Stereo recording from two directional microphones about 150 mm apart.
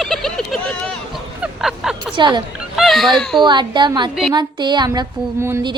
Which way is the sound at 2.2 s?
30° right (ahead or behind).